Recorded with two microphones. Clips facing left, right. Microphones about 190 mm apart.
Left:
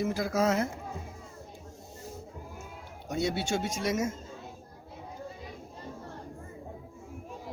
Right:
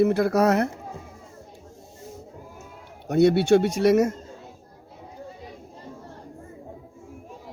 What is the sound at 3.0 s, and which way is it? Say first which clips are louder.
A man's voice: right 13 dB; 65° right (ahead or behind).